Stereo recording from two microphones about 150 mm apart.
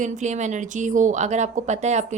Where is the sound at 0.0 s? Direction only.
50° right (ahead or behind).